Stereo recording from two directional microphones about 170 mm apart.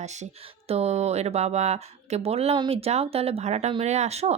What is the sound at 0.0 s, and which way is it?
Speech, 40° right (ahead or behind).